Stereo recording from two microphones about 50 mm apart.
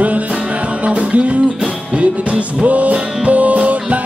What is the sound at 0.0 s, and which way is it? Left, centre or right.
Music, right.